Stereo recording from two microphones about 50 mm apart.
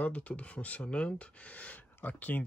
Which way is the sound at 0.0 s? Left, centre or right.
Left.